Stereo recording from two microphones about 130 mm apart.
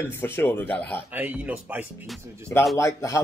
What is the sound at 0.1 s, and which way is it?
Speech, 15° left (ahead or behind).